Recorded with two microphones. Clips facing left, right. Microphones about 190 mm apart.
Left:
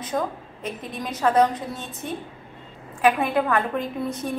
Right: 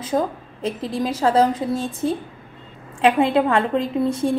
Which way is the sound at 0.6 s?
90° right.